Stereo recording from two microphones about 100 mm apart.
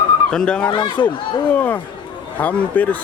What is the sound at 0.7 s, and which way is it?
Speech, 55° left (ahead or behind).